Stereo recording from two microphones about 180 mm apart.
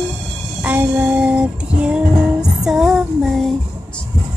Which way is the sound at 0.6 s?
10° right (ahead or behind).